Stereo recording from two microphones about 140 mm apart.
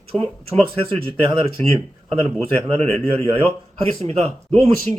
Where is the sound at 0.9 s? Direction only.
45° right (ahead or behind).